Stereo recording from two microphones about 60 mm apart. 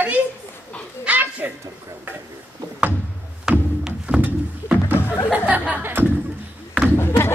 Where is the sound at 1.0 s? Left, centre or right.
Right.